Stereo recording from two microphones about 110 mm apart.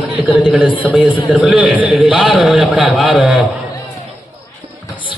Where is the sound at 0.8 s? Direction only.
15° right (ahead or behind).